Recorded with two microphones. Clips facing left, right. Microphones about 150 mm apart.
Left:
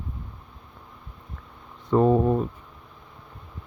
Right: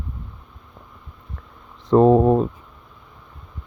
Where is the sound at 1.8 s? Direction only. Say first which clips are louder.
Right 6 dB; 80° right.